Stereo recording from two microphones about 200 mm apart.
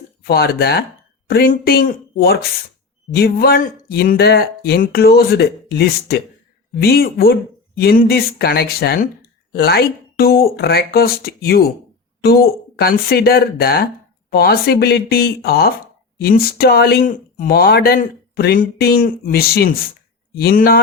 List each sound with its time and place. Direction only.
0.2 s speech: 50° left (ahead or behind)